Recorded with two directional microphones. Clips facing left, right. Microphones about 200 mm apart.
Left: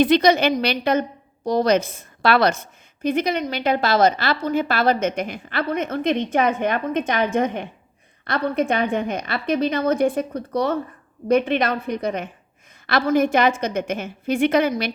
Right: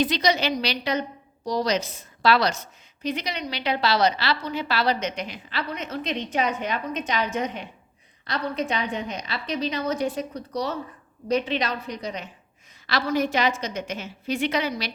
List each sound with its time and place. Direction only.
0.0 s a woman's voice: 55° left (ahead or behind)